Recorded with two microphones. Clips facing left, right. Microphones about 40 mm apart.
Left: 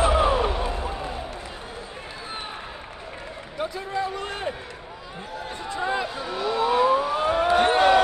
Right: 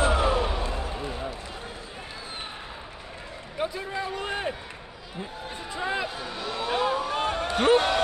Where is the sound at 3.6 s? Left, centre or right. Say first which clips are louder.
Left 2 dB; centre.